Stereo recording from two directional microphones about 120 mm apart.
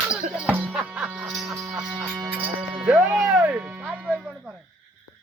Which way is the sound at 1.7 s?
5° right (ahead or behind).